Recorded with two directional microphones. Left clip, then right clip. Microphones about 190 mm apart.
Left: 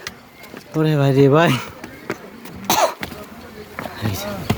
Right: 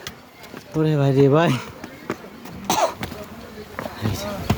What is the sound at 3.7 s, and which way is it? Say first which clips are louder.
Basketball bounce: left 2 dB; 5° left (ahead or behind).